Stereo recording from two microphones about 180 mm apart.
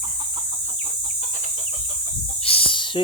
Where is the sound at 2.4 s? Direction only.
30° left (ahead or behind).